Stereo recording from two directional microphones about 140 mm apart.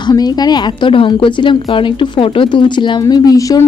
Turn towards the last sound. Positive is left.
turn(degrees=25)  # may be behind; listen again after turning